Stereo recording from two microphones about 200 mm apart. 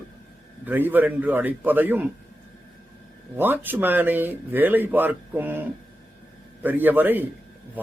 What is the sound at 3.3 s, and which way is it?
Speech, 10° right (ahead or behind).